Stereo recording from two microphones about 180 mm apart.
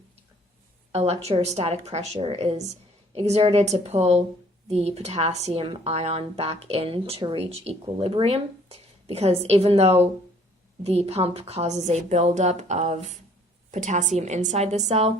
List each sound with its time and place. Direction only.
0.9 s speech: 35° right (ahead or behind)